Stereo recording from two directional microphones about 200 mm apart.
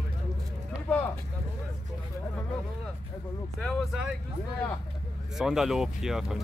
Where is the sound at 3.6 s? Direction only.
5° right (ahead or behind).